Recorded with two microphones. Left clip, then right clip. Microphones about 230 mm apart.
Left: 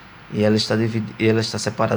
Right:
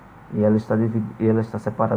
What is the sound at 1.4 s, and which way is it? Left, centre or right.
Speech, left.